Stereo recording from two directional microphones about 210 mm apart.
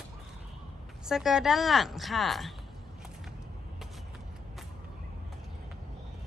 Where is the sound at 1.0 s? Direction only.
Centre (ahead or behind).